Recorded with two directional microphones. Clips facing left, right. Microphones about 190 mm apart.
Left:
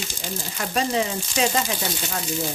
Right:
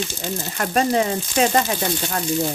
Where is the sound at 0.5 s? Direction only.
55° right (ahead or behind).